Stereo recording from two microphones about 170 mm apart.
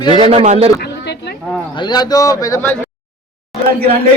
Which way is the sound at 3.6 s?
60° right (ahead or behind).